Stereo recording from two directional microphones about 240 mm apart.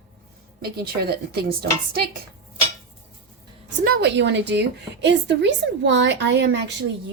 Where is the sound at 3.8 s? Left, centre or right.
Right.